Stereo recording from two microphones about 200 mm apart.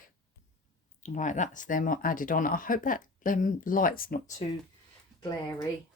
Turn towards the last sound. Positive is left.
turn(degrees=15)  # may be behind; listen again after turning